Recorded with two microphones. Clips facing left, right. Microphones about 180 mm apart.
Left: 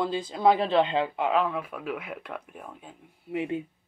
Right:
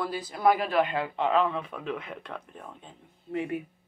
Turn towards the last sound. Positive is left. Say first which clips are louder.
# left 1 dB
turn(degrees=25)  # may be behind; listen again after turning